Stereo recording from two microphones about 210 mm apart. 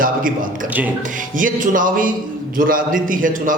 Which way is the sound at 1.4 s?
40° right (ahead or behind).